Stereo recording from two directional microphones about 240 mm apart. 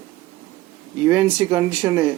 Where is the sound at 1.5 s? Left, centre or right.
Centre.